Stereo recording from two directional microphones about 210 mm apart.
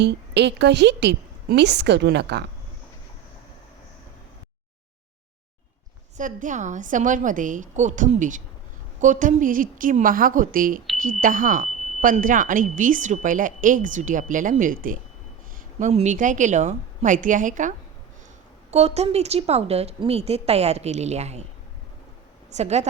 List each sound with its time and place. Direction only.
0.0 s a woman's voice: 55° right (ahead or behind)
6.1 s a woman's voice: 35° right (ahead or behind)
22.5 s speech: 30° right (ahead or behind)